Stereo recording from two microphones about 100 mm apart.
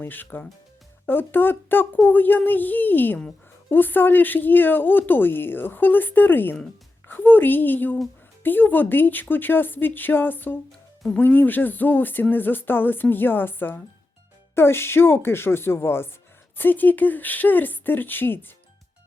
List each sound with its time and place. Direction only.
0.0 s speech: 20° left (ahead or behind)
10.7 s music: 5° left (ahead or behind)
11.2 s speech: 20° left (ahead or behind)